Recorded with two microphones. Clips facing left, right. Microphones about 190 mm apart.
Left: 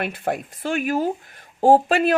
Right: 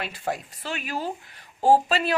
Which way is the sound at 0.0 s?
55° left (ahead or behind).